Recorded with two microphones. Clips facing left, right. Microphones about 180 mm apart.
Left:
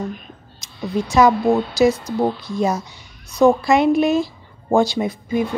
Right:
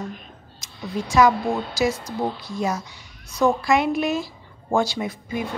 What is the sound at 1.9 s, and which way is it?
A woman's voice, 35° left (ahead or behind).